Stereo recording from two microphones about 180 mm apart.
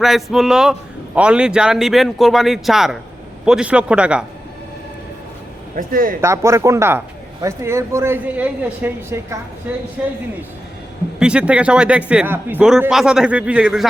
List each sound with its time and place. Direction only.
0.0 s a man's voice: centre (ahead or behind)
5.7 s speech: 50° right (ahead or behind)
6.2 s speech: 15° right (ahead or behind)
11.2 s a man's voice: 5° right (ahead or behind)